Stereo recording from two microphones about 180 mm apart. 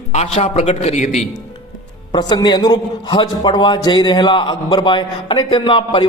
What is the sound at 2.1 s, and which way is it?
A man's voice, 25° left (ahead or behind).